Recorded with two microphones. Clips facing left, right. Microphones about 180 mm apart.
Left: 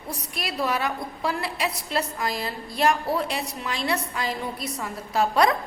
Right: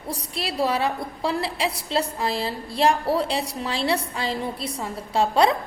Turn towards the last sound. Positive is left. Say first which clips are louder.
# right 2 dB
turn(degrees=-30)  # may be behind; listen again after turning